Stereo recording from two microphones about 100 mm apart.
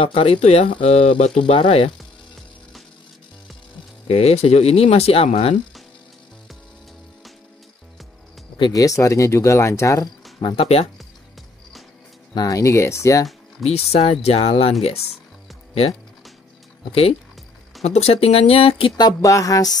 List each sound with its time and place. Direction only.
0.0 s speech: 75° left (ahead or behind)
4.1 s speech: 85° left
8.7 s speech: 35° left (ahead or behind)
10.4 s speech: 70° left (ahead or behind)
12.4 s speech: 35° left (ahead or behind)
13.7 s speech: 90° left
17.8 s speech: 90° left; by 18.9 s 70° left (ahead or behind)
18.9 s speech: 40° left (ahead or behind)